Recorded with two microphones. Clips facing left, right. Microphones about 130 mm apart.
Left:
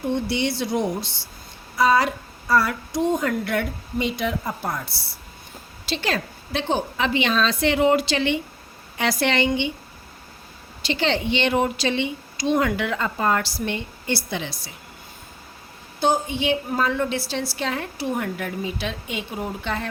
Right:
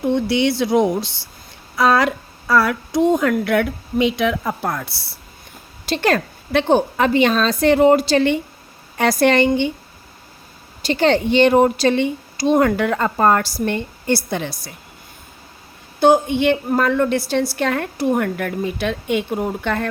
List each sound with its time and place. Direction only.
0.3 s a woman's voice: 90° right
5.8 s a woman's voice: 50° right (ahead or behind)
10.8 s a woman's voice: 45° right (ahead or behind)
16.0 s a woman's voice: 55° right (ahead or behind)